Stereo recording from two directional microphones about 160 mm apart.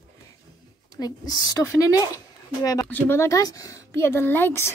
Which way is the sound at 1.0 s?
25° left (ahead or behind).